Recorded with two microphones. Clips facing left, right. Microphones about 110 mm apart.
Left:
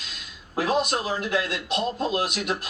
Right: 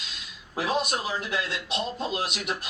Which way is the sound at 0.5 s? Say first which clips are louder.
Left 3 dB; 45° left (ahead or behind).